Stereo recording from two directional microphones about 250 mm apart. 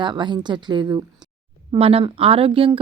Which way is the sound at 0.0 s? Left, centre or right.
Centre.